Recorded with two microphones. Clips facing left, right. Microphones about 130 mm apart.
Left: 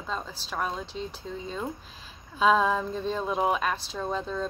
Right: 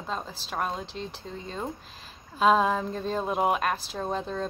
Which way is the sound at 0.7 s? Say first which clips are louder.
Even; centre (ahead or behind).